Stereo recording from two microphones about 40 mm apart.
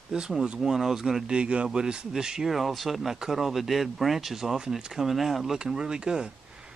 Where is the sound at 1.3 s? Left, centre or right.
Right.